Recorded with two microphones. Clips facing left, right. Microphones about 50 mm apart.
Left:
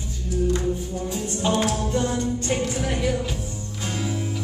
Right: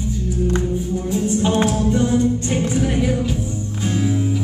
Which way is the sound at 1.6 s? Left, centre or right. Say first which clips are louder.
Right 5 dB; centre.